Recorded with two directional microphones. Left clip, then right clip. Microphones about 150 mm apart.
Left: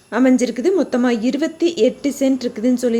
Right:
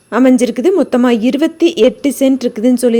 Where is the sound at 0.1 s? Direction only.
40° right (ahead or behind).